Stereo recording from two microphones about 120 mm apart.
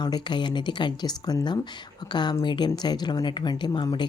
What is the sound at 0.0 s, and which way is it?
Speech, 40° left (ahead or behind).